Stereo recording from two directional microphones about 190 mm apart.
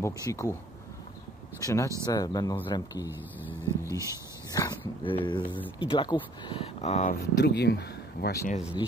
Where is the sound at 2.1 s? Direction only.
20° left (ahead or behind).